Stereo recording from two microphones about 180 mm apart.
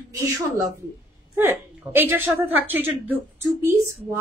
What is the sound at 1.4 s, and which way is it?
A woman's voice, 10° right (ahead or behind).